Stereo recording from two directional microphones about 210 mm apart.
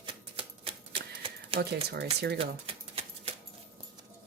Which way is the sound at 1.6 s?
50° right (ahead or behind).